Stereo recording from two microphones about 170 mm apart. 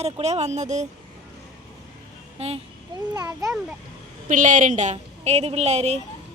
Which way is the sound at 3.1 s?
20° right (ahead or behind).